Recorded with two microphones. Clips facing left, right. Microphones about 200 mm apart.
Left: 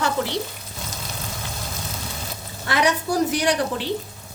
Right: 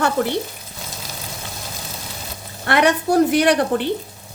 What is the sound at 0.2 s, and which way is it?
Frying, 50° right (ahead or behind).